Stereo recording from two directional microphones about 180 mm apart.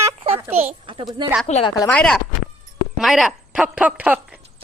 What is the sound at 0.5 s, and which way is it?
Speech, 30° right (ahead or behind).